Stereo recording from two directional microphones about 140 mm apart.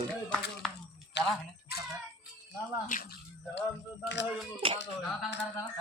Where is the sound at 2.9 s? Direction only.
70° left (ahead or behind).